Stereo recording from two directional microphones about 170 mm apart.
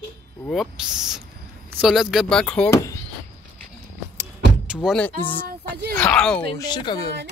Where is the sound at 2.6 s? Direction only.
20° left (ahead or behind).